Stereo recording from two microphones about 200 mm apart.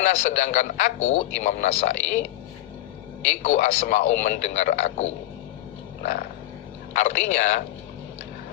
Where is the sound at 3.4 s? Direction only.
40° left (ahead or behind).